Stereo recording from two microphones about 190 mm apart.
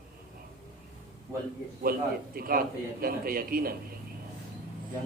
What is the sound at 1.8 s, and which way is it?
A man's voice, 50° right (ahead or behind).